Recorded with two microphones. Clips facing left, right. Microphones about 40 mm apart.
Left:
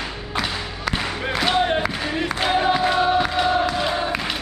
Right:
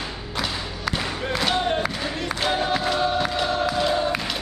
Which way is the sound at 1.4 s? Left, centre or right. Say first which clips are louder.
Left 3 dB; centre.